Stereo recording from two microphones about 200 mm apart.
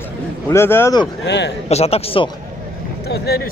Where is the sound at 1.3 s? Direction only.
60° left (ahead or behind).